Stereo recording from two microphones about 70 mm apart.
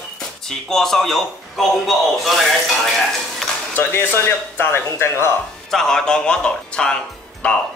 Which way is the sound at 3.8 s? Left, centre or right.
Left.